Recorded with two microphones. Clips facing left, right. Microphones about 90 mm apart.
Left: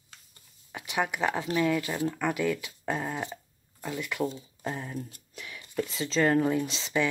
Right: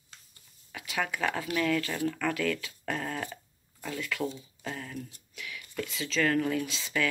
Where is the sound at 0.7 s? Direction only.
25° left (ahead or behind).